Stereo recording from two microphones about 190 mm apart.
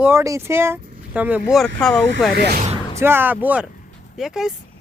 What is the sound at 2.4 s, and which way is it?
Speech, 50° right (ahead or behind).